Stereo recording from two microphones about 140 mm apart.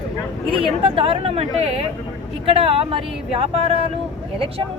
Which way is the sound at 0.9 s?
40° right (ahead or behind).